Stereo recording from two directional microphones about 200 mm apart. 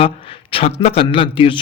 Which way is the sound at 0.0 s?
25° left (ahead or behind).